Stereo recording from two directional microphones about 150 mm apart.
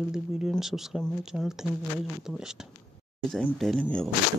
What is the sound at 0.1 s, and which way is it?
Speech, 5° right (ahead or behind).